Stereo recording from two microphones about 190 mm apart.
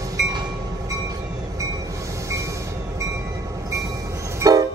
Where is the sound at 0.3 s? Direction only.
20° right (ahead or behind).